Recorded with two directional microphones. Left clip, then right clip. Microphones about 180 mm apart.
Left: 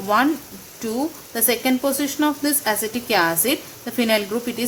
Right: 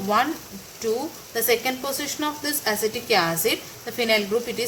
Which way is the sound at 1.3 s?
45° left (ahead or behind).